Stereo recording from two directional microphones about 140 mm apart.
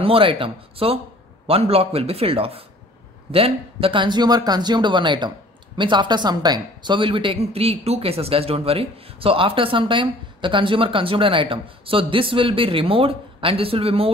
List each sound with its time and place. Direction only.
0.0 s speech: 40° right (ahead or behind)